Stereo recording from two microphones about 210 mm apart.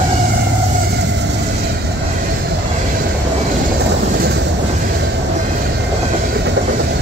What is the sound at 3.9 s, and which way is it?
Vehicle, 55° right (ahead or behind).